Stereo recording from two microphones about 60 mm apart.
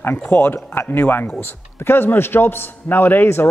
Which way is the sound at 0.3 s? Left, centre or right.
Left.